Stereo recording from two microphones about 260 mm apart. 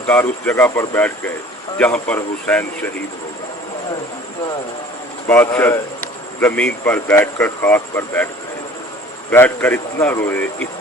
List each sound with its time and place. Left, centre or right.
0.1 s speech: centre
5.3 s speech: centre
9.3 s speech: centre